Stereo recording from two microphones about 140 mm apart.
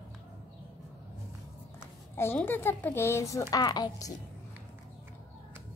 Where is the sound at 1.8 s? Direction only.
15° left (ahead or behind).